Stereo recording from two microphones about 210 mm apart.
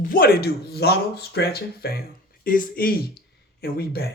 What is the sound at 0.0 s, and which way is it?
Speech, 45° left (ahead or behind).